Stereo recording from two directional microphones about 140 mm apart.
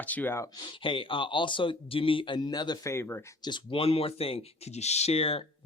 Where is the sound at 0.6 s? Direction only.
40° left (ahead or behind); by 3.2 s 20° left (ahead or behind).